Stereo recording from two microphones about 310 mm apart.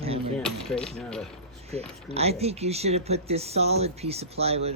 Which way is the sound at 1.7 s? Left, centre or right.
Centre.